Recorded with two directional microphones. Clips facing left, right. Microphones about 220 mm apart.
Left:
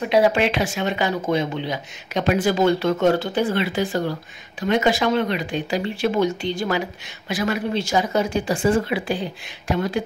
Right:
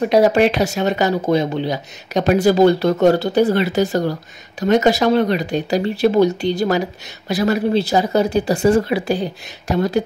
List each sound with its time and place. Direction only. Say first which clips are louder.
0.0 s speech: right 5 dB; 40° right (ahead or behind)